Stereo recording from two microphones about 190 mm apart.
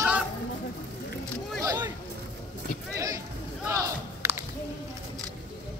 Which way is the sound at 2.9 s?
15° right (ahead or behind).